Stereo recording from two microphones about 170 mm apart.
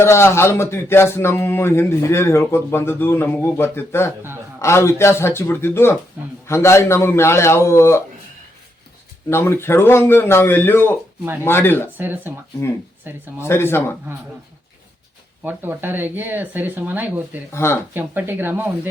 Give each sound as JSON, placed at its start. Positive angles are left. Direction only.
{"t": 0.0, "sound": "a man's voice", "side_deg": 15}
{"t": 9.3, "sound": "a man's voice", "side_deg": 15}
{"t": 11.9, "sound": "speech", "side_deg": -10}
{"t": 13.4, "sound": "a man's voice", "side_deg": 15}
{"t": 15.4, "sound": "speech", "side_deg": -10}
{"t": 17.5, "sound": "a man's voice", "side_deg": 15}
{"t": 17.9, "sound": "speech", "side_deg": -10}